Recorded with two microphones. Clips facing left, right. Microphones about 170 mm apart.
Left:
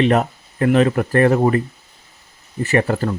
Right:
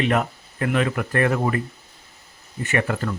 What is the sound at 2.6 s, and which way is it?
Speech, 35° left (ahead or behind).